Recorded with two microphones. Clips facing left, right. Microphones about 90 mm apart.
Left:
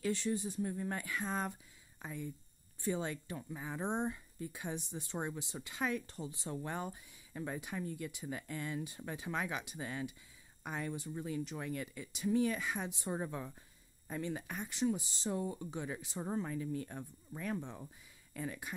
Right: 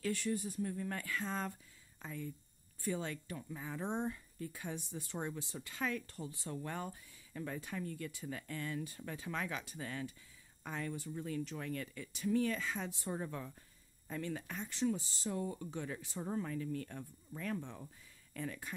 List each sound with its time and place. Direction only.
0.0 s speech: 25° left (ahead or behind)